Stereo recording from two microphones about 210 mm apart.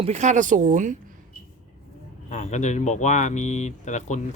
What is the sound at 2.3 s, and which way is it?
Speech, 35° left (ahead or behind).